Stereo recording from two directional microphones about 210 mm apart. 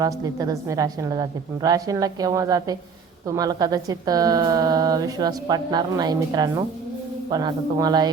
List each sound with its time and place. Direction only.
0.0 s a woman's voice: 15° right (ahead or behind)